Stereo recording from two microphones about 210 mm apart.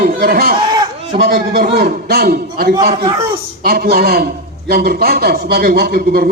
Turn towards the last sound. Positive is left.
turn(degrees=-45)  # may be behind; listen again after turning